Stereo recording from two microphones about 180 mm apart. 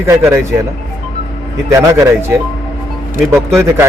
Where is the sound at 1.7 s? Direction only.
15° right (ahead or behind).